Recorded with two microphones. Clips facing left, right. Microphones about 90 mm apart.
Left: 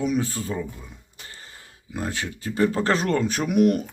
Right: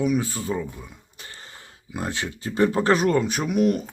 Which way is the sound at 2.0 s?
25° right (ahead or behind).